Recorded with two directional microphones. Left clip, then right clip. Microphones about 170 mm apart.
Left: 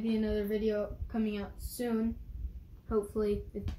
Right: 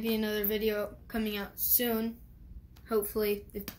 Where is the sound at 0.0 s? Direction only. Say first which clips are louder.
Right 1 dB; centre (ahead or behind).